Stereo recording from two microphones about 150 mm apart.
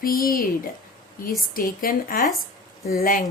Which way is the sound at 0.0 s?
75° left (ahead or behind).